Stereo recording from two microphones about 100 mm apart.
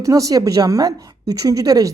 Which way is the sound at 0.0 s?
35° right (ahead or behind).